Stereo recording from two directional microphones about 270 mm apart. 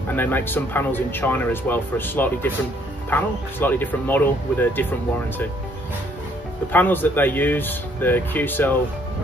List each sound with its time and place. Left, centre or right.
0.1 s speech: centre
6.7 s speech: centre